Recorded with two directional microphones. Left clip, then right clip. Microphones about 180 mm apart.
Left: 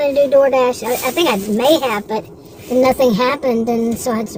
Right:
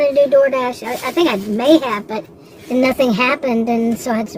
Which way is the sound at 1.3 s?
25° right (ahead or behind).